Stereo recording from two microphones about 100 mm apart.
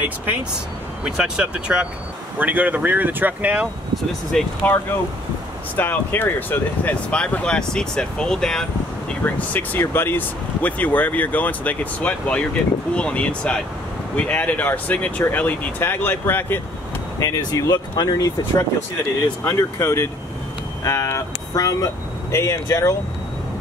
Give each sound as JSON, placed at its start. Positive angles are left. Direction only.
{"t": 0.0, "sound": "speech", "side_deg": -15}
{"t": 3.9, "sound": "speech", "side_deg": 5}
{"t": 5.8, "sound": "speech", "side_deg": 20}
{"t": 9.2, "sound": "speech", "side_deg": 15}
{"t": 17.2, "sound": "speech", "side_deg": 40}